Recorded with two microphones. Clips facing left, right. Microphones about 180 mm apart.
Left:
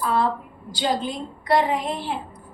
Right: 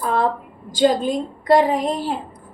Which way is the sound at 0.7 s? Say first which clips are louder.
Right 8 dB; 45° right (ahead or behind).